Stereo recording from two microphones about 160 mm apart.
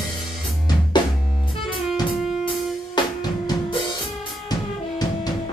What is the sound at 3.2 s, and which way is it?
Music, 30° left (ahead or behind).